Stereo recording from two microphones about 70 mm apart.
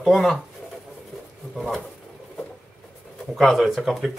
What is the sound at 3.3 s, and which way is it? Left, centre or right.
Speech, centre.